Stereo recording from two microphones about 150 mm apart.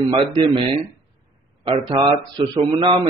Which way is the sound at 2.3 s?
30° right (ahead or behind).